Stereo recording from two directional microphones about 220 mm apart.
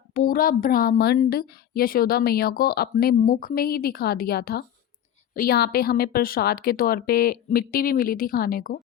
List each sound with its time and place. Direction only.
0.1 s a woman's voice: 40° left (ahead or behind)